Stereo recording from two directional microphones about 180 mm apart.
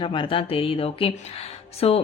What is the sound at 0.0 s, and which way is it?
Speech, 30° left (ahead or behind).